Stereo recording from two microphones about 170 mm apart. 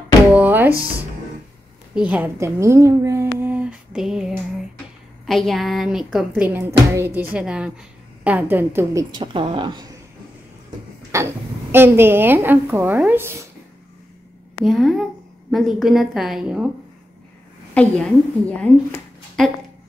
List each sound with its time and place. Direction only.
0.3 s music: 10° right (ahead or behind)
2.0 s a woman's voice: 10° right (ahead or behind)
9.1 s speech: 30° right (ahead or behind)
11.1 s a woman's voice: 15° right (ahead or behind)
14.6 s a woman's voice: centre (ahead or behind)
17.7 s a woman's voice: 5° left (ahead or behind)
18.6 s a sound: 5° left (ahead or behind)